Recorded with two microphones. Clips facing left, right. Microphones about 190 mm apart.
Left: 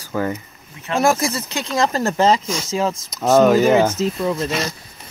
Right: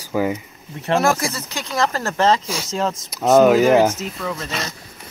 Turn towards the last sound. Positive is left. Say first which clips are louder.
# left 6 dB
turn(degrees=25)  # may be behind; listen again after turning